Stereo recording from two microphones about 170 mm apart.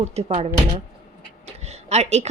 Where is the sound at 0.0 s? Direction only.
40° right (ahead or behind).